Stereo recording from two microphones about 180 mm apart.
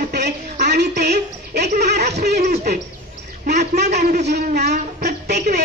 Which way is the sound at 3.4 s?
65° right (ahead or behind).